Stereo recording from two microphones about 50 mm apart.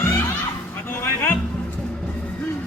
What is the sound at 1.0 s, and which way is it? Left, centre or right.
Music, left.